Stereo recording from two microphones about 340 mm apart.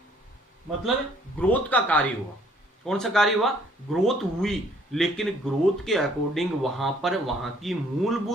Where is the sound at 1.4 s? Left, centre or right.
Centre.